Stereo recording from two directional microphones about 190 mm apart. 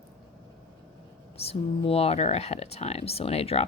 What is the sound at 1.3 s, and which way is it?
Speech, 30° left (ahead or behind).